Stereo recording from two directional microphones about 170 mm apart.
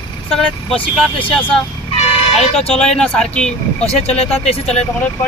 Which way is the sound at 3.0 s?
5° left (ahead or behind).